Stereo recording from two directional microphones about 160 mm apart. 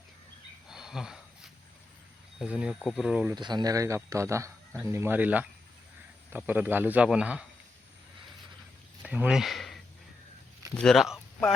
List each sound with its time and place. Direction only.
0.7 s a sound: 5° right (ahead or behind)
2.4 s speech: 5° right (ahead or behind)
3.3 s a man's voice: 25° right (ahead or behind); by 7.4 s 5° right (ahead or behind)
9.0 s speech: 5° right (ahead or behind)